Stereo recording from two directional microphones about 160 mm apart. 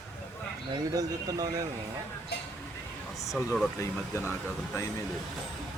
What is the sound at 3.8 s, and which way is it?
Speech, 15° left (ahead or behind).